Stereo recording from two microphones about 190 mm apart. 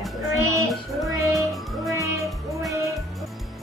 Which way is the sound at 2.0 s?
15° right (ahead or behind).